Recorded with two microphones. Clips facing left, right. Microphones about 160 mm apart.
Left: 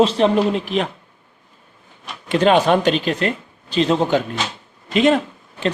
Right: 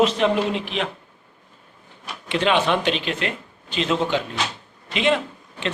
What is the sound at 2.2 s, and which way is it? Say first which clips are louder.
Speech: left 6 dB; 45° left (ahead or behind).